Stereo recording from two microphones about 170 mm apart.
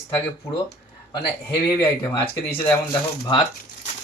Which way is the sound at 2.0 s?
15° left (ahead or behind).